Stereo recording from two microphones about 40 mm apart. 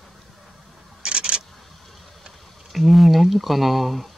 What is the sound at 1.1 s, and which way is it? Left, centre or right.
Camera, right.